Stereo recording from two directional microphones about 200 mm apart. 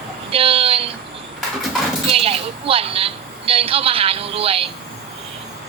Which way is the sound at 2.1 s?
30° right (ahead or behind).